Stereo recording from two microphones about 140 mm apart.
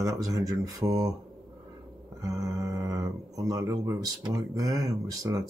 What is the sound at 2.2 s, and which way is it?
Speech, 25° right (ahead or behind).